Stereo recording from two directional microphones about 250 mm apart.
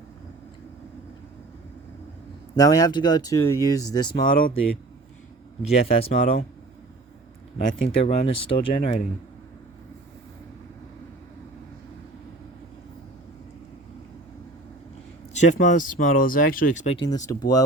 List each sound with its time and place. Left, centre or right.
2.6 s speech: centre
4.2 s speech: left
5.6 s speech: left
7.7 s speech: left
15.6 s speech: left
17.1 s speech: centre